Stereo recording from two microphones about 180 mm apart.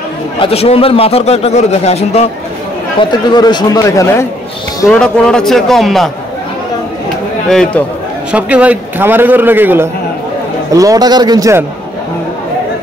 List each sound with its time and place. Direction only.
0.4 s a man's voice: 35° left (ahead or behind)
3.0 s speech: 25° left (ahead or behind)
4.8 s a man's voice: 5° left (ahead or behind)
7.4 s a man's voice: 5° left (ahead or behind); by 11.6 s 20° right (ahead or behind)